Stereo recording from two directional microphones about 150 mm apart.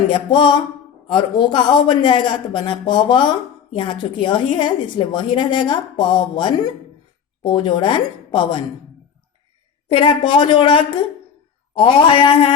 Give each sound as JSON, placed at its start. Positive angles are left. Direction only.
{"t": 0.1, "sound": "a man's voice", "side_deg": 30}
{"t": 9.9, "sound": "a man's voice", "side_deg": 35}